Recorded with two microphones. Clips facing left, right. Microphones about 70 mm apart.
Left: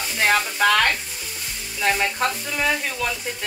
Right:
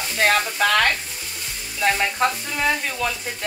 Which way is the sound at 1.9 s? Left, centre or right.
Centre.